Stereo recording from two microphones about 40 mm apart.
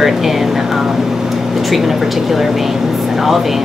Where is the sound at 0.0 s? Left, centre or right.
Centre.